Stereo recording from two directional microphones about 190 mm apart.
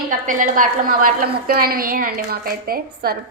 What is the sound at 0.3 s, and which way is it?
A woman's voice, 45° right (ahead or behind).